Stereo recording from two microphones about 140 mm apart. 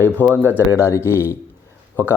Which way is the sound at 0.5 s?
20° left (ahead or behind).